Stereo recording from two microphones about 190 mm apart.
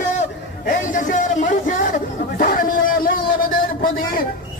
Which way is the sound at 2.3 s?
50° left (ahead or behind).